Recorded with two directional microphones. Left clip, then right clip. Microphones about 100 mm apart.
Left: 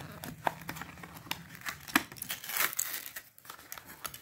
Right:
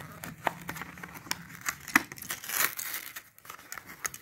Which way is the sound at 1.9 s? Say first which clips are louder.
Right 4 dB; 25° left (ahead or behind).